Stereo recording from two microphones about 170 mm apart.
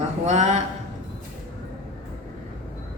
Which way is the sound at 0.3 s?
40° right (ahead or behind).